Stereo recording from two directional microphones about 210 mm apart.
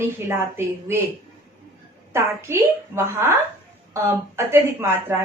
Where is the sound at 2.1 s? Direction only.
10° right (ahead or behind).